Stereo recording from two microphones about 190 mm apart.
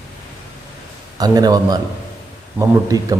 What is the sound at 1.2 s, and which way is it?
A man's voice, 20° right (ahead or behind).